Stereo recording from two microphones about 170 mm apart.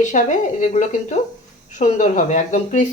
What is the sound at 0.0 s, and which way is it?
Speech, 45° left (ahead or behind).